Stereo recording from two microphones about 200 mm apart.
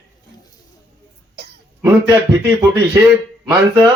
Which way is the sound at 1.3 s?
55° right (ahead or behind).